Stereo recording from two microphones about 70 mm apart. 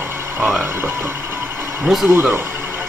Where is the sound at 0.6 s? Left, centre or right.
Right.